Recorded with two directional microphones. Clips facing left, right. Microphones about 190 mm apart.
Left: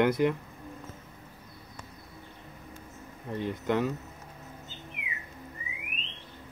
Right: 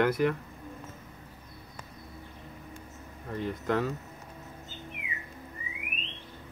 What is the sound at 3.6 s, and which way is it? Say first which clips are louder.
Speech: left 1 dB; 5° left (ahead or behind).